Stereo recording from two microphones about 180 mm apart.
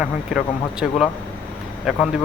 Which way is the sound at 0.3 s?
5° right (ahead or behind).